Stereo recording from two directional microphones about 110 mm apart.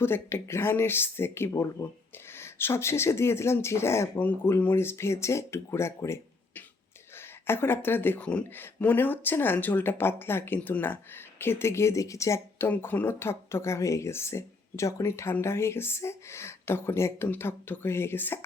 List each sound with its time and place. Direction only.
0.0 s speech: 20° left (ahead or behind)